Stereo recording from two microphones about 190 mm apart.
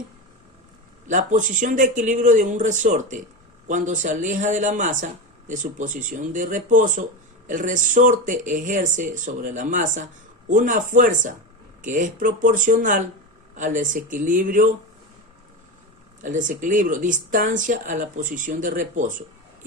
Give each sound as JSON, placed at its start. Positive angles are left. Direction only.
{"t": 1.0, "sound": "speech", "side_deg": -40}
{"t": 16.2, "sound": "speech", "side_deg": -45}